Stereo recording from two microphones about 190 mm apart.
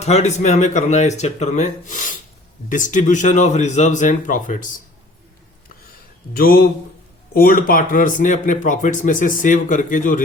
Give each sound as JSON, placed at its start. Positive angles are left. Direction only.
{"t": 0.0, "sound": "speech", "side_deg": 35}
{"t": 6.3, "sound": "speech", "side_deg": 50}